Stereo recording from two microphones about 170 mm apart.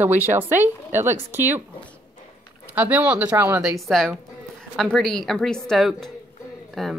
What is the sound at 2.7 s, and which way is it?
A woman's voice, 10° right (ahead or behind).